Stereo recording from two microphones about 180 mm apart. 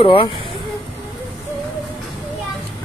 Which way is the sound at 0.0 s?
30° left (ahead or behind).